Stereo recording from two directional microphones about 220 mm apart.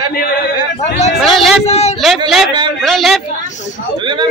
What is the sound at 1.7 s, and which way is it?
Speech, 30° left (ahead or behind).